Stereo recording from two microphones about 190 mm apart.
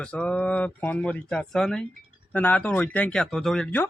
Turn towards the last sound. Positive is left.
turn(degrees=5)  # may be behind; listen again after turning